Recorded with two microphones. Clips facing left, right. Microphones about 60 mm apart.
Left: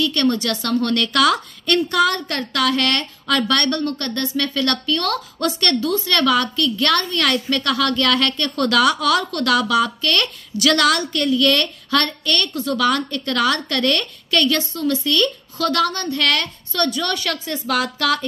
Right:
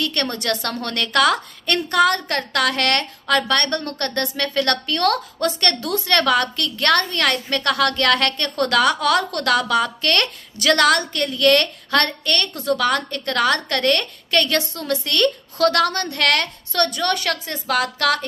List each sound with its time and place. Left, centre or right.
0.0 s a woman's voice: right
3.3 s a woman's voice: right
3.8 s a woman's voice: right
14.8 s a woman's voice: right